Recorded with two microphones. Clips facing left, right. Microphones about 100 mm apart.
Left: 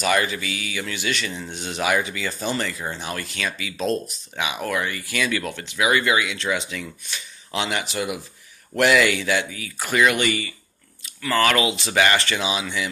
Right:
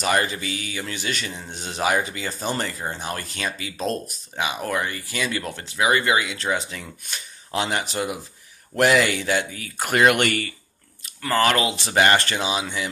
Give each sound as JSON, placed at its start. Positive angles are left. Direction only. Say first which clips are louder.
{"t": 0.0, "sound": "speech", "louder": "left 1 dB", "side_deg": -35}
{"t": 11.1, "sound": "speech", "louder": "even", "side_deg": -35}
{"t": 11.9, "sound": "speech", "louder": "right 2 dB", "side_deg": -50}